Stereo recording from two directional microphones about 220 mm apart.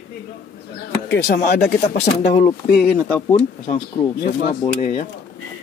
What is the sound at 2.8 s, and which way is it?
Speech, 5° left (ahead or behind).